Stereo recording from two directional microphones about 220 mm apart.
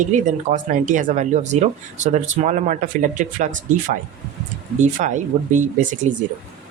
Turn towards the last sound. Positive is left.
turn(degrees=-35)  # may be behind; listen again after turning